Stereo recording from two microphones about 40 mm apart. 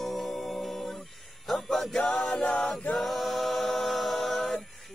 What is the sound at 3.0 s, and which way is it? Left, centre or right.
Choir, centre.